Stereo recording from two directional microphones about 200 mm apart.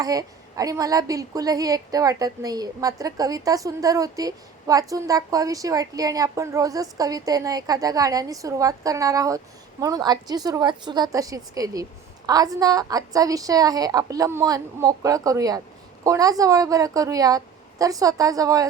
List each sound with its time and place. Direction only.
0.0 s a woman's voice: 15° right (ahead or behind)